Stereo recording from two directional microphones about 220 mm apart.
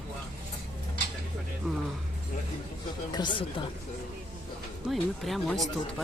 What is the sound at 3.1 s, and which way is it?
Speech, 20° left (ahead or behind).